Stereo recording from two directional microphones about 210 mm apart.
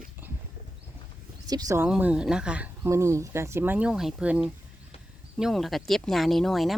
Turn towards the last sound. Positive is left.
turn(degrees=0)  # may be behind; listen again after turning